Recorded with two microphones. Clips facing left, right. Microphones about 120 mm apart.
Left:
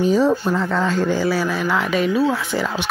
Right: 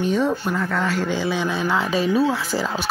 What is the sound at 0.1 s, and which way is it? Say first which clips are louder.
Speech: left 4 dB; 35° left (ahead or behind).